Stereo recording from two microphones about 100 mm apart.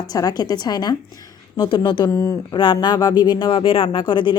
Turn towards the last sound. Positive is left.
turn(degrees=50)  # may be behind; listen again after turning